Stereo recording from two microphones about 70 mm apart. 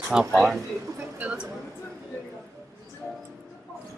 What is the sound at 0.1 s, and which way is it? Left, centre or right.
Speech, centre.